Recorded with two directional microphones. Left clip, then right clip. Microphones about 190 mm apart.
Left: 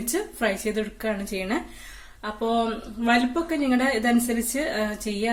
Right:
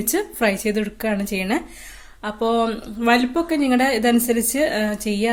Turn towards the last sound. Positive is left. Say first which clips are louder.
# right 5 dB
turn(degrees=-45)  # may be behind; listen again after turning